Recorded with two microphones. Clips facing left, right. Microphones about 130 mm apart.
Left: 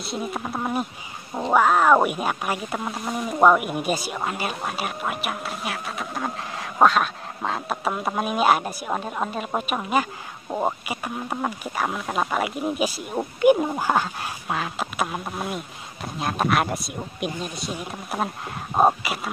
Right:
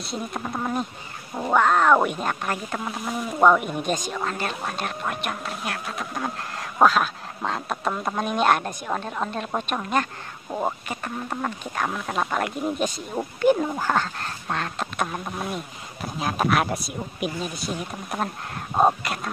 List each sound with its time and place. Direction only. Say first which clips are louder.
0.0 s speech: left 2 dB; 5° left (ahead or behind)